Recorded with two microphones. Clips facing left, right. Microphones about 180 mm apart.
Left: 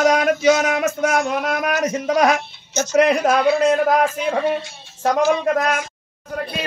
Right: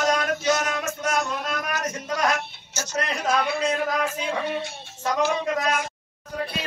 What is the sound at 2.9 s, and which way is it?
Speech, 60° left (ahead or behind).